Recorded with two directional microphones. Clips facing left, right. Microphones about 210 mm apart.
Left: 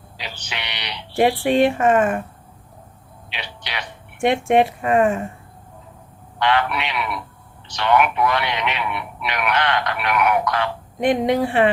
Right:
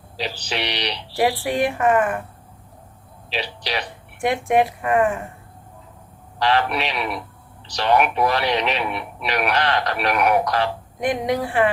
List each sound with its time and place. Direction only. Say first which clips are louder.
0.2 s a man's voice: right 7 dB; 35° right (ahead or behind)
1.1 s speech: left 4 dB; 25° left (ahead or behind)
3.2 s a man's voice: right 7 dB; 35° right (ahead or behind)
4.2 s speech: left 2 dB; 25° left (ahead or behind)
6.4 s a man's voice: even; 35° right (ahead or behind)
11.0 s speech: left 4 dB; 25° left (ahead or behind)